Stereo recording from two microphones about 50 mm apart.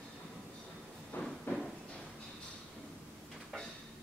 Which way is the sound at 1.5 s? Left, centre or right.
Left.